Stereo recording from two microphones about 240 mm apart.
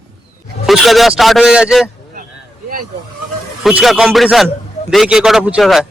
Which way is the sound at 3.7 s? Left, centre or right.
Centre.